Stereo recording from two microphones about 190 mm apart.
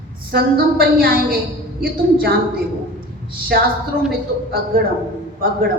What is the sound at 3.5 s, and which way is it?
Speech, 55° right (ahead or behind).